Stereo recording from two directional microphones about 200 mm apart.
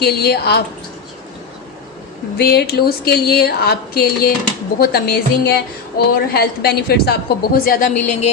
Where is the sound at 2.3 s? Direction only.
55° left (ahead or behind).